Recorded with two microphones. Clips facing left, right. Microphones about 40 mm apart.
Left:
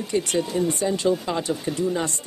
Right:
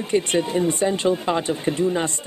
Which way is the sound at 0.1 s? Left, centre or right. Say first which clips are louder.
Right 3 dB; right.